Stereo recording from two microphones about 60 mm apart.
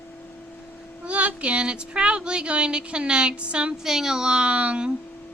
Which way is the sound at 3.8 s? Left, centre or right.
Centre.